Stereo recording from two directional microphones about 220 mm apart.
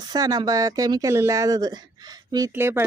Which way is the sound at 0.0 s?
15° right (ahead or behind).